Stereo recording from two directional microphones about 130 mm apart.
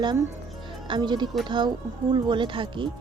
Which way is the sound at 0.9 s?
35° right (ahead or behind).